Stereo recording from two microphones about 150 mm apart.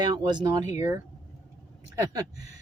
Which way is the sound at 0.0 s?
30° right (ahead or behind).